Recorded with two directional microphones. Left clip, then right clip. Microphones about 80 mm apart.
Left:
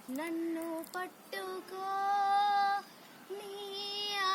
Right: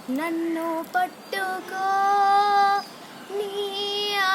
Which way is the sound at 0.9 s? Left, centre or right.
Right.